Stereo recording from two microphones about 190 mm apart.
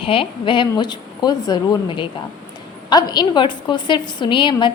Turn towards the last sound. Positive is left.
turn(degrees=25)  # may be behind; listen again after turning